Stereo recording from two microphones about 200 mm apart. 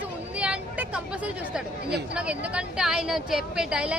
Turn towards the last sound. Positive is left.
turn(degrees=-5)  # may be behind; listen again after turning